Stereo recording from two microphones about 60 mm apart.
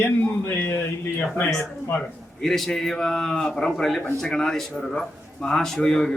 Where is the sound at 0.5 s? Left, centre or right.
Left.